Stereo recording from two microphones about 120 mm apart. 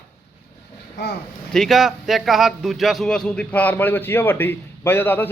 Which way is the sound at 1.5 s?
Centre (ahead or behind).